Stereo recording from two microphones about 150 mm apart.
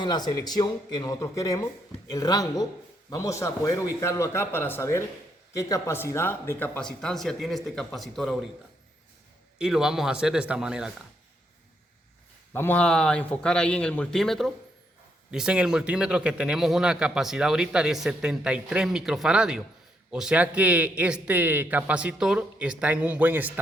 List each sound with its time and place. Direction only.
0.0 s a man's voice: 30° left (ahead or behind); by 8.4 s centre (ahead or behind)
9.6 s a man's voice: 5° right (ahead or behind)
12.5 s a man's voice: 10° left (ahead or behind); by 23.6 s 10° right (ahead or behind)